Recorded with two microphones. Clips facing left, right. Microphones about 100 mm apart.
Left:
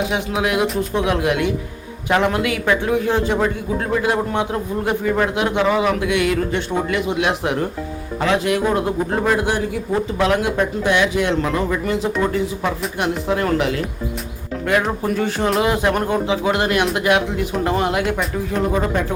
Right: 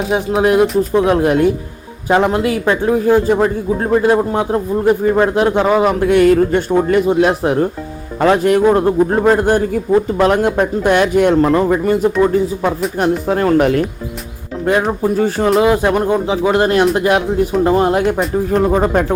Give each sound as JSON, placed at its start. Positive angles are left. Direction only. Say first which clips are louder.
{"t": 0.1, "sound": "speech", "louder": "right 7 dB", "side_deg": -35}
{"t": 2.0, "sound": "speech", "louder": "right 4 dB", "side_deg": -25}
{"t": 14.6, "sound": "speech", "louder": "right 5 dB", "side_deg": -30}
{"t": 15.6, "sound": "speech", "louder": "right 5 dB", "side_deg": -25}
{"t": 16.2, "sound": "speech", "louder": "right 5 dB", "side_deg": -30}